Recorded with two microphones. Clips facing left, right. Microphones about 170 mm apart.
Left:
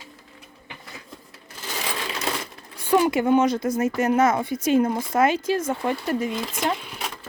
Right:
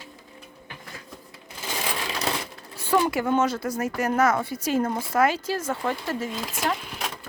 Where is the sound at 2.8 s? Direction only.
15° left (ahead or behind).